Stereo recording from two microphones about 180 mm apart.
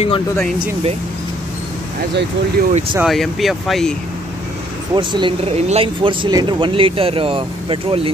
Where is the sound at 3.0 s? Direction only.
Centre (ahead or behind).